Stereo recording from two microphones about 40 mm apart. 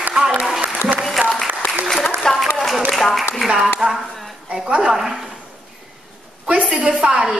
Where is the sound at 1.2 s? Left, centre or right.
Right.